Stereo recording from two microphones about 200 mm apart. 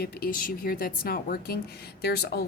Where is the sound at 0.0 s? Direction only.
45° left (ahead or behind).